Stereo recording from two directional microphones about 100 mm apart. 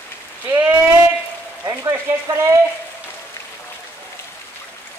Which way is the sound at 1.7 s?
30° right (ahead or behind).